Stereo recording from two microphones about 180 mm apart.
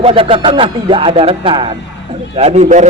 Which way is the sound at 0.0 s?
30° right (ahead or behind).